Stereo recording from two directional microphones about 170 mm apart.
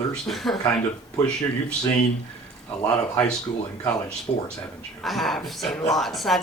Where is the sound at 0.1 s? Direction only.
Centre (ahead or behind).